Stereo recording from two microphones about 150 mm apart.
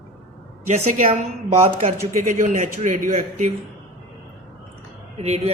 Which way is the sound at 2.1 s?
60° right (ahead or behind).